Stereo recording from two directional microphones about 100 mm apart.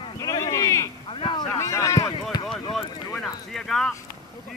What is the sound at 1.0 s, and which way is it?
Speech, 55° left (ahead or behind).